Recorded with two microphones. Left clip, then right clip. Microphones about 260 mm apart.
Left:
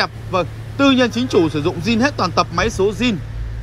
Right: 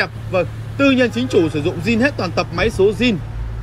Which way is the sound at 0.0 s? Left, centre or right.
Centre.